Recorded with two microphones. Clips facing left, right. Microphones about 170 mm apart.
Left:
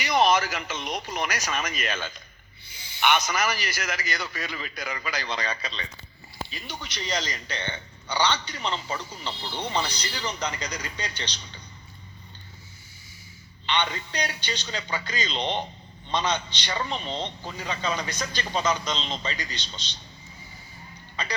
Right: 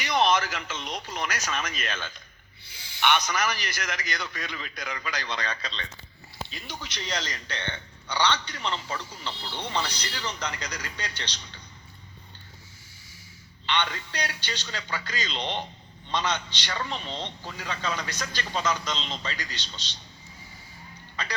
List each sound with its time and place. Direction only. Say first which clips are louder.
0.0 s a man's voice: left 2 dB; 10° left (ahead or behind)
13.7 s a man's voice: left 1 dB; 15° left (ahead or behind)